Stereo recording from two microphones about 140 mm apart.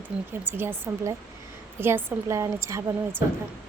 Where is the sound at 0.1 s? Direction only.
5° right (ahead or behind).